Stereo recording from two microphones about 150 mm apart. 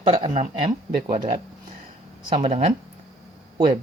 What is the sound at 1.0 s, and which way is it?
Speech, 35° right (ahead or behind).